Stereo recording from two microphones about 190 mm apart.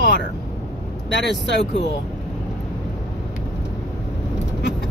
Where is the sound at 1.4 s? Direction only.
65° left (ahead or behind).